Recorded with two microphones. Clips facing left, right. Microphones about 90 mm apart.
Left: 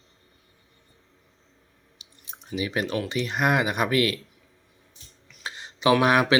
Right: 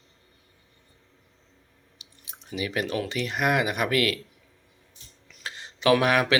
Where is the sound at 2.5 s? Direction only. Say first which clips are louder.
Left 1 dB; 25° left (ahead or behind).